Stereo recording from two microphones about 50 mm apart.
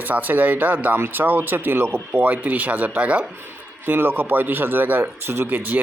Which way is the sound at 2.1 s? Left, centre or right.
Right.